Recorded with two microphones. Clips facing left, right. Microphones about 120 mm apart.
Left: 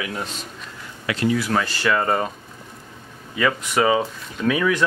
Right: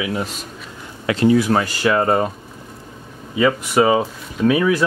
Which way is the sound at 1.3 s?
20° right (ahead or behind).